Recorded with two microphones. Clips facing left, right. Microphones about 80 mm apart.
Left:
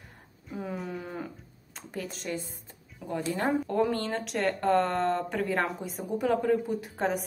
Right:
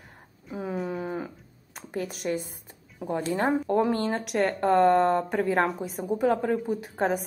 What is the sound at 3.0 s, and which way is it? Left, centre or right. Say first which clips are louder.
Speech: right 3 dB; right.